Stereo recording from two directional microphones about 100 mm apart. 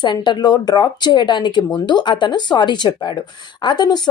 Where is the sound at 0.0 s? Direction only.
50° left (ahead or behind).